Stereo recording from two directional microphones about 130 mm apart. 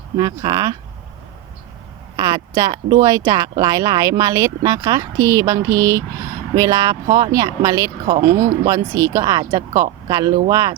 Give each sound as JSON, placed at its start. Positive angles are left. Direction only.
{"t": 0.2, "sound": "speech", "side_deg": -30}
{"t": 2.1, "sound": "speech", "side_deg": -30}